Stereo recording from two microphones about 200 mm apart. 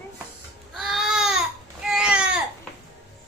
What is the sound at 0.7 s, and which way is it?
Baby cry, centre (ahead or behind).